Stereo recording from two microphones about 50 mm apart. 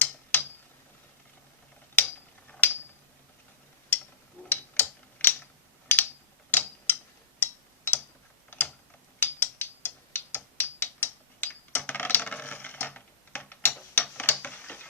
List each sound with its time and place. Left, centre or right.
0.0 s tick-tock: left
2.0 s a sound: left
4.4 s mechanisms: left
5.9 s a sound: left
6.5 s tick-tock: left
8.4 s gears: left
9.2 s mechanisms: left